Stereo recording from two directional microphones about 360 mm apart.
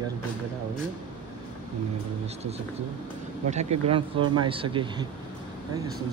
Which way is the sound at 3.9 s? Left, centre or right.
Centre.